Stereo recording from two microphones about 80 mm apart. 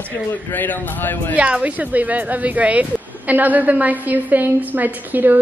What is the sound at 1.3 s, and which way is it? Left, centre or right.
A woman's voice, centre.